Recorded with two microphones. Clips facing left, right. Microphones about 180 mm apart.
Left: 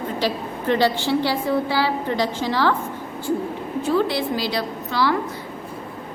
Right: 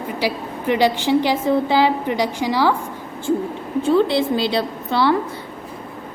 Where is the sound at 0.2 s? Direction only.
15° right (ahead or behind).